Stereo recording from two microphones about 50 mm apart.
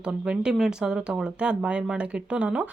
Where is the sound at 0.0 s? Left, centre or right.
Centre.